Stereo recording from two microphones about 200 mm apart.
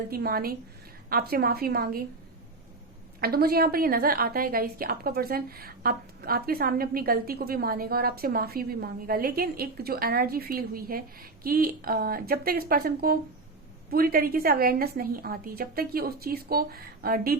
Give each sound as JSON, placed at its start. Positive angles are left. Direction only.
{"t": 0.1, "sound": "a woman's voice", "side_deg": -50}
{"t": 3.2, "sound": "a woman's voice", "side_deg": -50}